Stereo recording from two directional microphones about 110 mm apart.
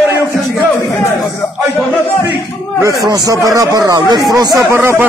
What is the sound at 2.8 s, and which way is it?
Speech, 35° right (ahead or behind).